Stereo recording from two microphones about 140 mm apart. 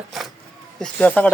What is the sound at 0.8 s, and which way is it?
Speech, 10° left (ahead or behind).